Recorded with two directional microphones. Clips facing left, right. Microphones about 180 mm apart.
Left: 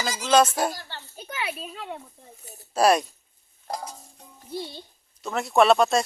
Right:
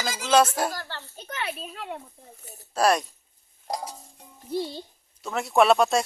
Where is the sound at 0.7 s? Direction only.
90° right.